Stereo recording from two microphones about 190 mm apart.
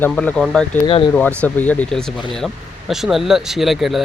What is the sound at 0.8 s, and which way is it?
Speech, 25° left (ahead or behind).